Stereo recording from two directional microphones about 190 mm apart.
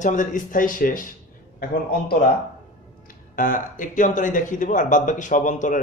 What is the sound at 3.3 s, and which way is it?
Speech, 45° left (ahead or behind).